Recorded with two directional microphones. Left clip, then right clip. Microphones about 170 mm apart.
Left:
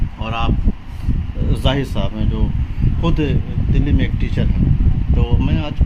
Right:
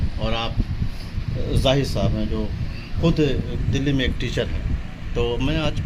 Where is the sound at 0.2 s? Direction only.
5° right (ahead or behind).